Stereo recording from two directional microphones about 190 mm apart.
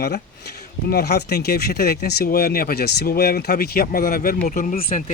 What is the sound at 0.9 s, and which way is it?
Speech, 55° left (ahead or behind).